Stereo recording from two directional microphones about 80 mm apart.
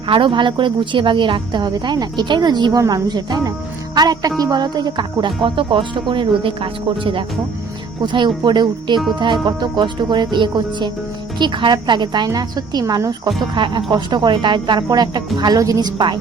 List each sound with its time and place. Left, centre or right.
0.1 s speech: right
2.7 s a woman's voice: right
3.1 s speech: right
8.0 s speech: right
13.1 s speech: right
15.5 s a woman's voice: right